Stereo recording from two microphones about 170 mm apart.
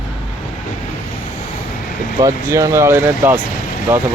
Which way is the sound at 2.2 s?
20° right (ahead or behind).